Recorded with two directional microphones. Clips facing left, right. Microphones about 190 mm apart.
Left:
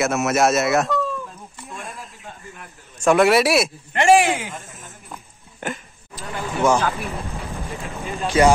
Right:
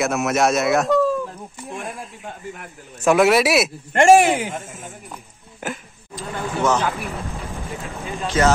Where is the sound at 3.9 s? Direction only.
45° right (ahead or behind).